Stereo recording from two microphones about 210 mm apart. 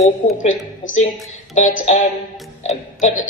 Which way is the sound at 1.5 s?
35° left (ahead or behind).